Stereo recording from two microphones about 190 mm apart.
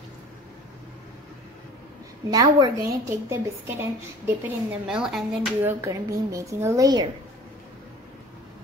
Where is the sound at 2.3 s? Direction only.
20° right (ahead or behind).